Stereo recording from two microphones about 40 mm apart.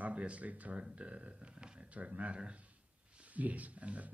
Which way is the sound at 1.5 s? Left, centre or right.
Right.